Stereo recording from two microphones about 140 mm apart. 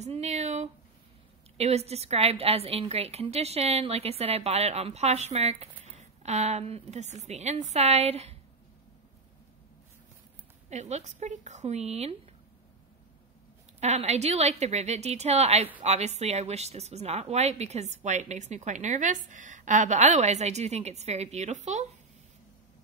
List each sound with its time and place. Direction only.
0.0 s a sound: 50° right (ahead or behind)
1.6 s speech: 50° right (ahead or behind)
10.7 s speech: 55° right (ahead or behind)
13.7 s speech: 50° right (ahead or behind)